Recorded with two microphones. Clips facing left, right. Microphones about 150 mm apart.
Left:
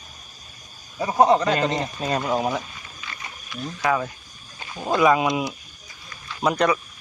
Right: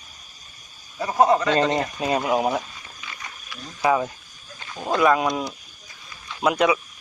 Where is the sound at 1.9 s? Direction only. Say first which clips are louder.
Right 2 dB; 10° right (ahead or behind).